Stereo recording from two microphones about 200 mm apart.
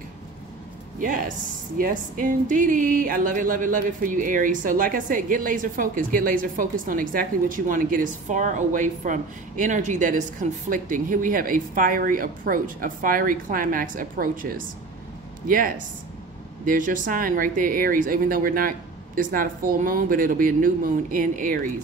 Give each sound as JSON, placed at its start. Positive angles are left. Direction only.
{"t": 0.9, "sound": "speech", "side_deg": -40}